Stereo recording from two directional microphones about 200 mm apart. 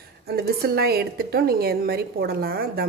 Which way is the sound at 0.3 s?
50° right (ahead or behind).